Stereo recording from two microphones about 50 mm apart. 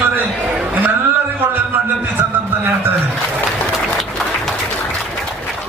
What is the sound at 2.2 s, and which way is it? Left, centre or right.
Speech, right.